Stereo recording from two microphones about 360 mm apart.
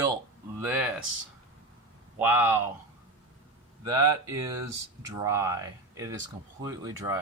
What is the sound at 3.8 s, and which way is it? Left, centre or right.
Speech, centre.